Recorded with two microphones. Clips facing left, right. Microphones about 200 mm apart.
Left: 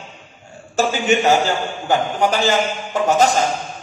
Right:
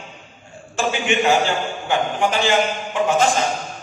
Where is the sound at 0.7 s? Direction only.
40° left (ahead or behind).